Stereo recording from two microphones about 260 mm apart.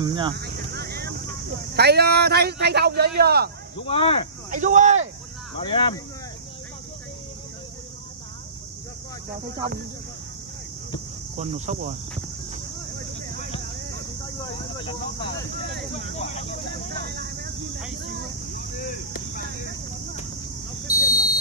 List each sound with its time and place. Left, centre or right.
0.0 s speech: centre
0.4 s a sound: right
1.7 s a man's voice: right
3.8 s speech: left
4.5 s speech: right
5.6 s speech: centre
11.3 s speech: right
14.4 s speech: centre
16.9 s vehicle: right
18.8 s a sound: left
20.9 s a sound: centre